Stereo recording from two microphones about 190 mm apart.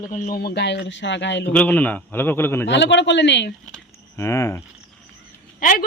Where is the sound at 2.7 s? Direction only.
70° left (ahead or behind).